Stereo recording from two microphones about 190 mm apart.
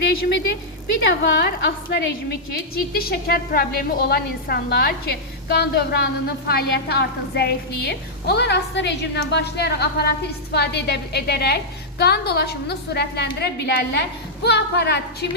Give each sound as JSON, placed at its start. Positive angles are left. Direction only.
{"t": 1.2, "sound": "a woman's voice", "side_deg": 65}